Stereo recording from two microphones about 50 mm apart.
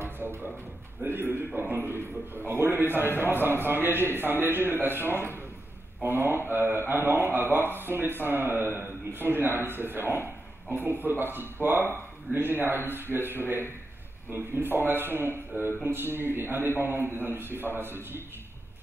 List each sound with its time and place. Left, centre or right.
0.0 s music: right
1.0 s a man's voice: right
11.6 s speech: right
12.3 s a man's voice: right